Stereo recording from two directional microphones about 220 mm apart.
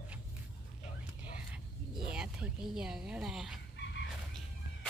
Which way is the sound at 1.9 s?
5° right (ahead or behind).